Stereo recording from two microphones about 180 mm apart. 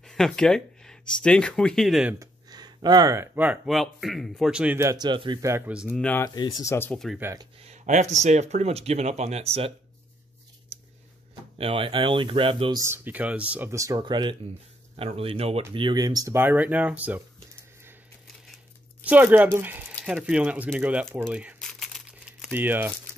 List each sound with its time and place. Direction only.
0.0 s speech: 5° left (ahead or behind)
2.1 s speech: 20° right (ahead or behind)
5.7 s speech: 5° right (ahead or behind)
6.0 s speech: 10° left (ahead or behind)
6.3 s speech: 20° left (ahead or behind)
7.2 s speech: 15° right (ahead or behind)
7.5 s speech: 35° right (ahead or behind)
11.5 s speech: 30° right (ahead or behind)
12.8 s speech: 10° right (ahead or behind)
19.0 s speech: 10° right (ahead or behind)
21.5 s crumpling: centre (ahead or behind)